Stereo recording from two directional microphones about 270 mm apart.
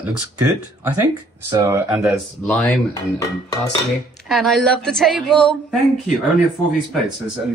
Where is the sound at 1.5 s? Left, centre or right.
Centre.